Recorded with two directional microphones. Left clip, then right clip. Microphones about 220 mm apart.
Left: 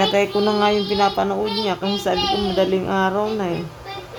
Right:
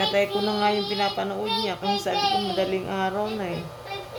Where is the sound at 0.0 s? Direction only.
20° left (ahead or behind).